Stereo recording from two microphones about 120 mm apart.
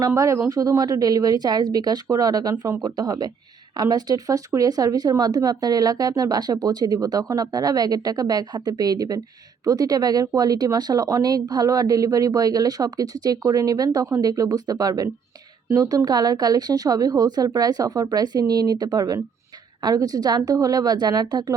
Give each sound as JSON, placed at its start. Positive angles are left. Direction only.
{"t": 0.0, "sound": "speech", "side_deg": -25}